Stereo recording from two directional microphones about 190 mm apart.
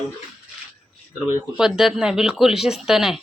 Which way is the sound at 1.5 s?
5° right (ahead or behind).